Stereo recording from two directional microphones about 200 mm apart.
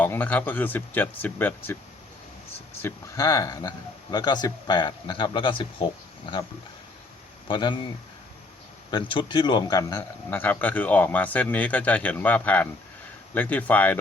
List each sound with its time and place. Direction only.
0.0 s a man's voice: 10° left (ahead or behind)
2.8 s a man's voice: 15° left (ahead or behind)
7.4 s speech: 25° left (ahead or behind)
8.9 s a man's voice: 25° left (ahead or behind); by 14.0 s 10° left (ahead or behind)